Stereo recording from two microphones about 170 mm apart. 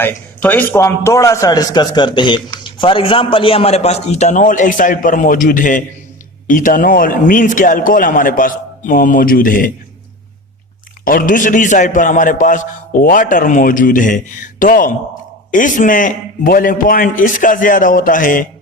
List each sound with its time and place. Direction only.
0.0 s a man's voice: 10° left (ahead or behind); by 9.7 s 55° left (ahead or behind)
11.0 s a man's voice: 55° left (ahead or behind)